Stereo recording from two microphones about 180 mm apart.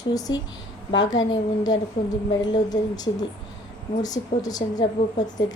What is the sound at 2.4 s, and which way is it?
Speech, 20° left (ahead or behind).